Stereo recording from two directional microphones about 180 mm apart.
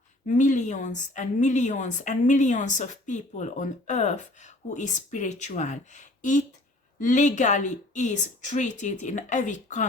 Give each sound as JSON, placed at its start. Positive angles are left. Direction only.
{"t": 0.3, "sound": "a woman's voice", "side_deg": 45}